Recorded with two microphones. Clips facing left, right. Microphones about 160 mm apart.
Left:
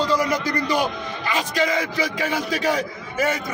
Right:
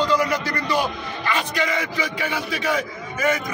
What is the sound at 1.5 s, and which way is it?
A man's voice, 35° left (ahead or behind).